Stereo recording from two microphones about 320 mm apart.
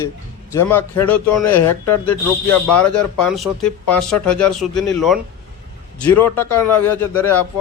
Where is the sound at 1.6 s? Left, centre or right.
Left.